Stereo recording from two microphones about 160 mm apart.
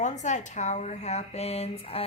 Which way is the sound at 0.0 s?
50° left (ahead or behind).